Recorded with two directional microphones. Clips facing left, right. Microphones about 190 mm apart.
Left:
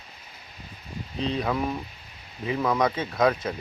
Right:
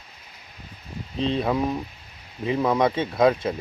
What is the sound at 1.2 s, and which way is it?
Speech, 25° right (ahead or behind).